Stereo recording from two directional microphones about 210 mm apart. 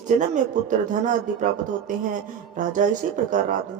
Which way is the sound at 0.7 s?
35° right (ahead or behind).